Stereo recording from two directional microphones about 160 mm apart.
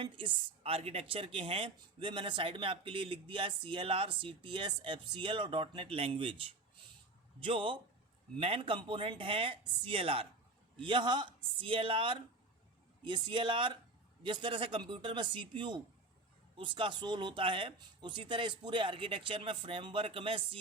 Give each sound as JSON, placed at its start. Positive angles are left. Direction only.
{"t": 0.0, "sound": "a man's voice", "side_deg": -30}